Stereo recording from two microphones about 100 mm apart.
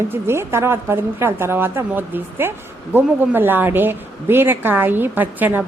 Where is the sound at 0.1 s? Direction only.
25° right (ahead or behind).